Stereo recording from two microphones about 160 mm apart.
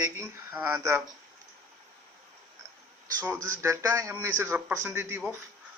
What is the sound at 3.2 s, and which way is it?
Speech, 20° right (ahead or behind).